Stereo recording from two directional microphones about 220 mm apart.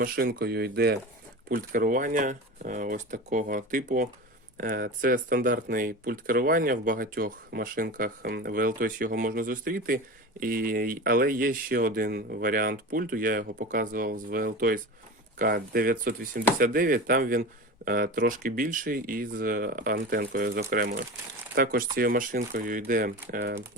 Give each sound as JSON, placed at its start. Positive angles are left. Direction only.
{"t": 0.0, "sound": "speech", "side_deg": -40}